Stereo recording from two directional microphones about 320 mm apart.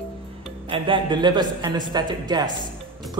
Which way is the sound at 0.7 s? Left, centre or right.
Centre.